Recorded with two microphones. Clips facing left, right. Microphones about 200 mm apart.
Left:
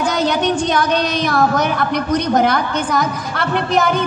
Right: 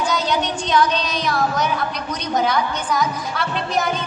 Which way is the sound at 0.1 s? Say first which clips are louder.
Left 5 dB; 55° left (ahead or behind).